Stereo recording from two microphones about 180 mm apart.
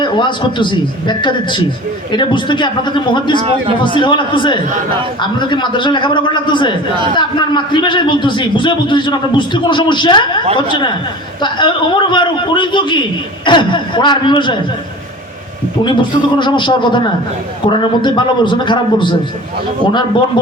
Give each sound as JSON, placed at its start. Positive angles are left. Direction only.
{"t": 0.0, "sound": "a man's voice", "side_deg": 25}
{"t": 3.3, "sound": "a man's voice", "side_deg": -25}
{"t": 3.9, "sound": "a man's voice", "side_deg": 25}
{"t": 15.8, "sound": "a man's voice", "side_deg": 25}